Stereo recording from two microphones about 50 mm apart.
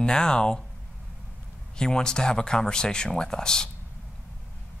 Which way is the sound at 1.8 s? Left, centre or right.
Centre.